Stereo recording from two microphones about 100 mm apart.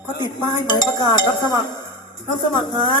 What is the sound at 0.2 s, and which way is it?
Speech, 45° left (ahead or behind).